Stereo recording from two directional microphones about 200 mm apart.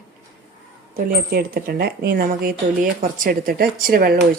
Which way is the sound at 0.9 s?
45° right (ahead or behind).